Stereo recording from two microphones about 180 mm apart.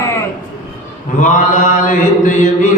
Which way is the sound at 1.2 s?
45° left (ahead or behind).